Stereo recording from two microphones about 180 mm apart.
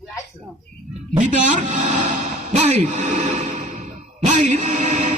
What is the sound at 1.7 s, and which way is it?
Music, 45° right (ahead or behind).